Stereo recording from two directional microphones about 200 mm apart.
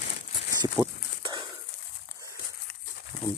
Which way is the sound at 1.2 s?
20° right (ahead or behind).